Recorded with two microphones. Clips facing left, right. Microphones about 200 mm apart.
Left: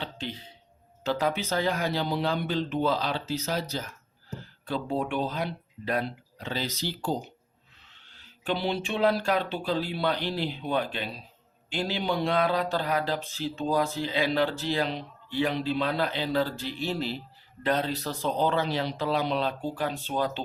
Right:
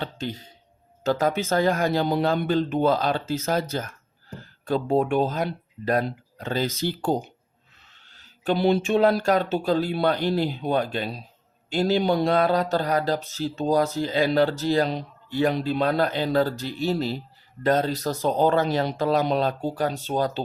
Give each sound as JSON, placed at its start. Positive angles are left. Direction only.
{"t": 0.0, "sound": "a sound", "side_deg": -45}
{"t": 1.0, "sound": "speech", "side_deg": -45}
{"t": 8.1, "sound": "speech", "side_deg": -40}